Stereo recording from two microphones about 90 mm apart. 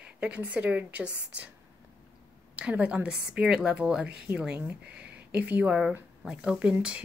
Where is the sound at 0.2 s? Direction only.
15° right (ahead or behind).